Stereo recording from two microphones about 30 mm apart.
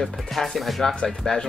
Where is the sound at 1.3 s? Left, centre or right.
Left.